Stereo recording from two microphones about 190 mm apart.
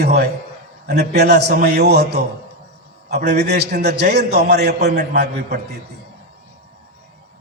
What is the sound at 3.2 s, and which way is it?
A man's voice, 60° right (ahead or behind).